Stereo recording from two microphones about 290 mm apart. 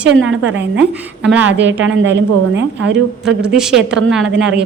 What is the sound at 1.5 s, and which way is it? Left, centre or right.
A woman's voice, right.